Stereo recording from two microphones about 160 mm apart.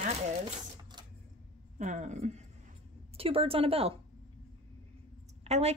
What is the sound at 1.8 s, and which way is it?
A woman's voice, 50° right (ahead or behind).